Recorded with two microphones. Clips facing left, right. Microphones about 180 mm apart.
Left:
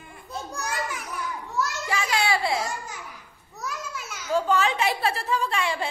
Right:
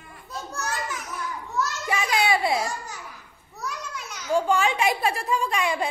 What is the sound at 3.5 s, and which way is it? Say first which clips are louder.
Babbling: even; 5° left (ahead or behind).